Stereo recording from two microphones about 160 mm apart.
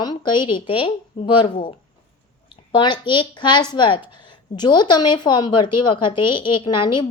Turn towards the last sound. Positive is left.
turn(degrees=30)  # may be behind; listen again after turning